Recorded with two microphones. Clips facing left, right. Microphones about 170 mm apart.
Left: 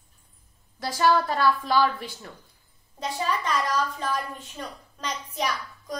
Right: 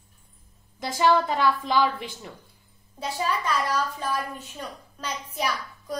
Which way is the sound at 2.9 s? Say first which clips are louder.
Even; 5° right (ahead or behind).